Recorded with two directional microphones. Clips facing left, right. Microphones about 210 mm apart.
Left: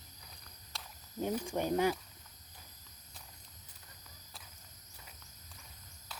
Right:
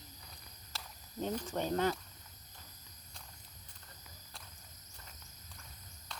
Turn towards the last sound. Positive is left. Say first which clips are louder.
# right 1 dB
turn(degrees=5)  # may be behind; listen again after turning